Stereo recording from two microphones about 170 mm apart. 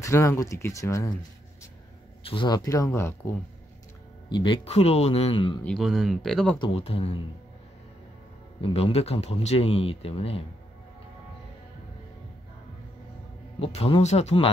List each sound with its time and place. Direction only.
0.0 s speech: 15° left (ahead or behind)
2.2 s speech: 25° left (ahead or behind)
4.3 s speech: 30° left (ahead or behind)
5.6 s speech: centre (ahead or behind)
6.6 s speech: 35° left (ahead or behind)
8.5 s speech: 35° left (ahead or behind)
13.6 s speech: 35° left (ahead or behind)